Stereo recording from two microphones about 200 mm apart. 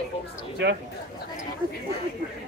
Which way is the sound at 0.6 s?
65° right (ahead or behind).